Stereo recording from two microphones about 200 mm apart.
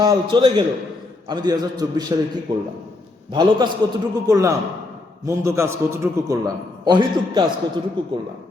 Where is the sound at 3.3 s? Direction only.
20° right (ahead or behind).